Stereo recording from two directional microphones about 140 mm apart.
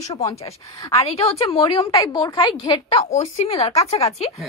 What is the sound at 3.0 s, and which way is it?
A woman's voice, 50° left (ahead or behind).